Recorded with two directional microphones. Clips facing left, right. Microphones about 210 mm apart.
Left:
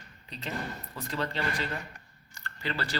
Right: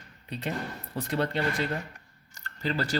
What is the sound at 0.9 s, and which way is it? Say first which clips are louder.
Speech: right 6 dB; 55° right (ahead or behind).